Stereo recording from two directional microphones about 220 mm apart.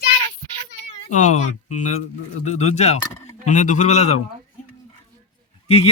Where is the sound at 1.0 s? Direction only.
35° left (ahead or behind).